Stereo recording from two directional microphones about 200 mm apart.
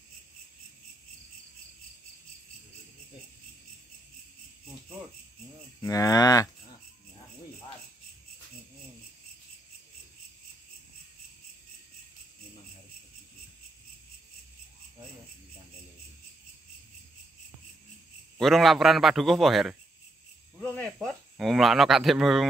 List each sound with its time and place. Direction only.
5.8 s cattle: 15° left (ahead or behind)
18.4 s a man's voice: centre (ahead or behind)
20.5 s cricket: 5° left (ahead or behind)